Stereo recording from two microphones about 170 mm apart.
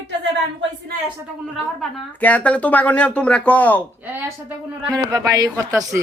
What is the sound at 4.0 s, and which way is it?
Speech, 10° right (ahead or behind).